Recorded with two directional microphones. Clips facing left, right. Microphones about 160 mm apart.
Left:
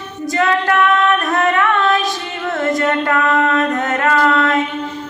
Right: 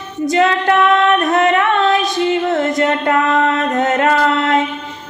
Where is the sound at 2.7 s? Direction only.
20° right (ahead or behind).